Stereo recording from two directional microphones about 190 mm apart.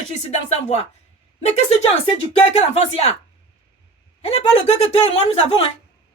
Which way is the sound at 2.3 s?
35° left (ahead or behind).